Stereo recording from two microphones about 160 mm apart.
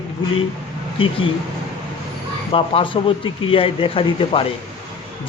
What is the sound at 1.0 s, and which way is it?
Speech, 35° left (ahead or behind).